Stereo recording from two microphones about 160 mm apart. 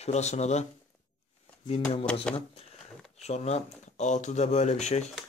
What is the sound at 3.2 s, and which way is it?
Speech, 45° left (ahead or behind).